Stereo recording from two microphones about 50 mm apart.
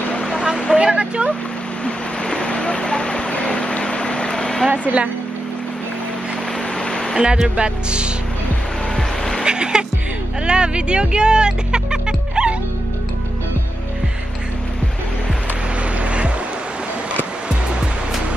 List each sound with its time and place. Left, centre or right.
0.7 s speech: right
1.9 s vehicle: centre
4.6 s speech: right
6.8 s a sound: centre
7.2 s speech: centre
8.9 s vehicle: centre
9.4 s speech: centre
16.0 s music: right
17.5 s music: centre